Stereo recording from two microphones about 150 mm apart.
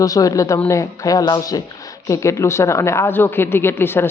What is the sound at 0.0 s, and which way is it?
Speech, 25° left (ahead or behind).